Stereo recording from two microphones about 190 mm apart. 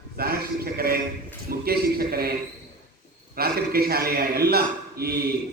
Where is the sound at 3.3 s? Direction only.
55° right (ahead or behind).